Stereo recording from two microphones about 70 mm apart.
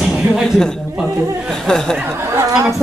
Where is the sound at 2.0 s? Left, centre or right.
Right.